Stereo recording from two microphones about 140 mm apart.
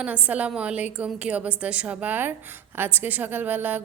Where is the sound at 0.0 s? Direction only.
10° right (ahead or behind).